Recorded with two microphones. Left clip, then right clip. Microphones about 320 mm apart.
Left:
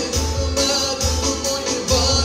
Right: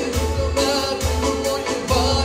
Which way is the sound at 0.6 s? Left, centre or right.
Right.